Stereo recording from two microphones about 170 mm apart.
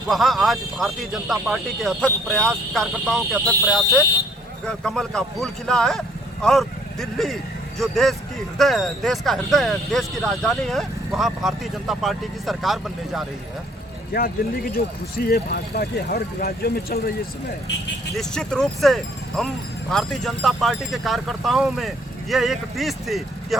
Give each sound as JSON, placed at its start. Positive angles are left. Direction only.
{"t": 0.1, "sound": "speech", "side_deg": 0}
{"t": 14.1, "sound": "speech", "side_deg": 60}
{"t": 18.1, "sound": "speech", "side_deg": 5}